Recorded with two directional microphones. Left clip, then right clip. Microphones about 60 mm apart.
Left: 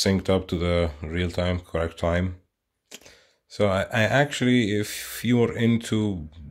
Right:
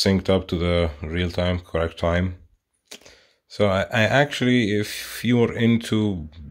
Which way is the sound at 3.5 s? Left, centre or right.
Right.